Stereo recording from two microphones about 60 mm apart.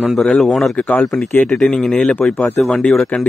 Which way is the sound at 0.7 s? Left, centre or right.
Left.